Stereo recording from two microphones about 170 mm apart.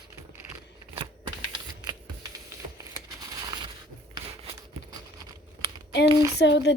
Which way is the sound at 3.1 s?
25° right (ahead or behind).